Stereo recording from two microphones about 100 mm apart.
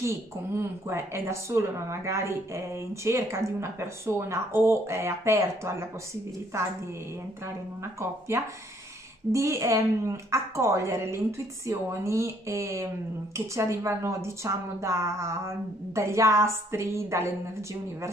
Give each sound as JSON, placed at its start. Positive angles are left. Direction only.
{"t": 0.6, "sound": "speech", "side_deg": -25}
{"t": 7.8, "sound": "speech", "side_deg": -30}